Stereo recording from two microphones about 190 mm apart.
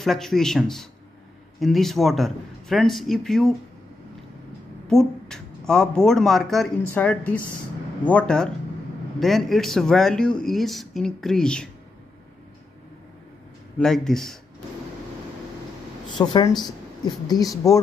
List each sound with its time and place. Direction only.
0.0 s speech: centre (ahead or behind)
4.8 s speech: 5° left (ahead or behind)
13.7 s speech: centre (ahead or behind)
16.2 s speech: 15° left (ahead or behind)